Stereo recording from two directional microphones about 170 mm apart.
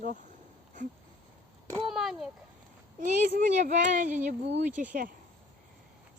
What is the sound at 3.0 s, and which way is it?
Speech, 50° right (ahead or behind).